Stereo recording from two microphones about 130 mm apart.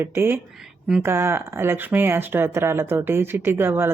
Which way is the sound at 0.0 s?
15° right (ahead or behind).